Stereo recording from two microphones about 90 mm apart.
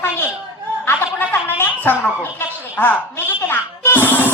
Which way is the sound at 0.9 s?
25° left (ahead or behind).